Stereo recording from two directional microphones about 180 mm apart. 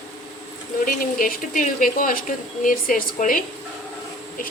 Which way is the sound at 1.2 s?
50° left (ahead or behind).